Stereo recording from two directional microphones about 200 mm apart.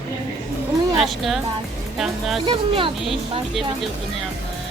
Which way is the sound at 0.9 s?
Centre (ahead or behind).